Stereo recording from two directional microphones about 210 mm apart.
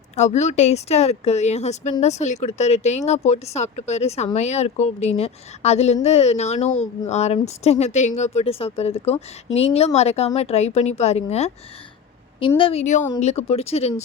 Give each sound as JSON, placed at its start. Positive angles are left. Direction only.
{"t": 0.2, "sound": "speech", "side_deg": 35}